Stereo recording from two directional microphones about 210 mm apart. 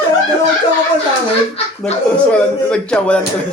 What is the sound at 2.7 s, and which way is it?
Speech, 5° left (ahead or behind).